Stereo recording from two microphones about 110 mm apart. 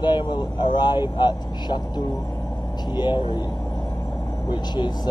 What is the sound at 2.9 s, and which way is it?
Speech, 45° left (ahead or behind).